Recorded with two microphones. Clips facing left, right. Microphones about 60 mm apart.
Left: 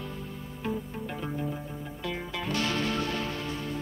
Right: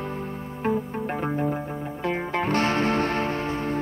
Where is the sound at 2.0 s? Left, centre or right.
Right.